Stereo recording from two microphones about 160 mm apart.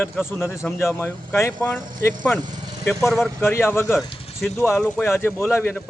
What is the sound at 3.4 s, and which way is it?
Speech, 15° left (ahead or behind).